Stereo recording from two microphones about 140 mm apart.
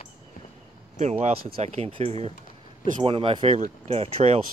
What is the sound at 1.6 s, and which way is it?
Speech, 45° right (ahead or behind).